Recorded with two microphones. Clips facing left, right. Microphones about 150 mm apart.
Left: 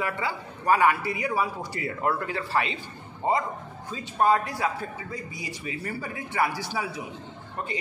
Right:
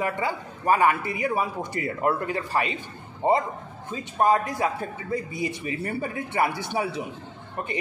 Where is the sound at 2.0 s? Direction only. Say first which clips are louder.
Right 2 dB; 45° right (ahead or behind).